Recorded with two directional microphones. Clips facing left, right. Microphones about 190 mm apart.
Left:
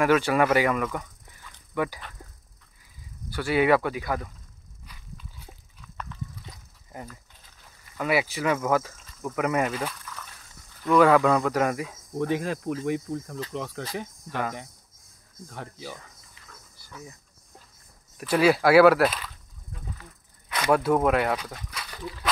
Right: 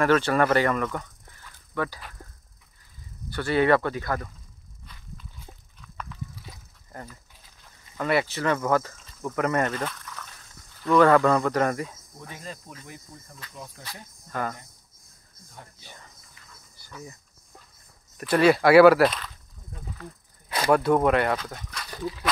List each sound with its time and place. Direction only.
0.0 s speech: 10° left (ahead or behind)
1.5 s dog: 15° left (ahead or behind)
3.3 s speech: 10° left (ahead or behind)
5.8 s a sound: centre (ahead or behind)
6.9 s speech: 15° left (ahead or behind)
12.2 s speech: 85° left
15.5 s speech: 85° left
16.7 s a sound: centre (ahead or behind)
18.1 s speech: centre (ahead or behind)
20.4 s a sound: 30° right (ahead or behind)
20.7 s speech: centre (ahead or behind)